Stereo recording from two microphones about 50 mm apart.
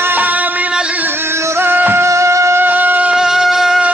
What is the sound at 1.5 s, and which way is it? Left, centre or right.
Music, right.